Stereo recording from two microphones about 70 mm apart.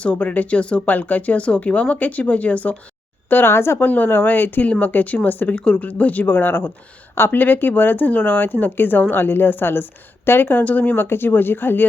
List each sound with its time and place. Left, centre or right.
0.0 s speech: centre
3.2 s speech: left